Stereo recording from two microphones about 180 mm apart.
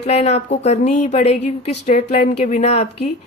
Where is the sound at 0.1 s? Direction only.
35° left (ahead or behind).